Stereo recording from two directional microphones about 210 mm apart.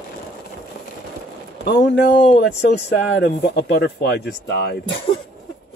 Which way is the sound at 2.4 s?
50° left (ahead or behind).